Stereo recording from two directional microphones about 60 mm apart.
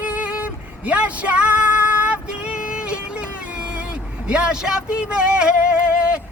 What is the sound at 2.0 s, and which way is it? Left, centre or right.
Female singing, centre.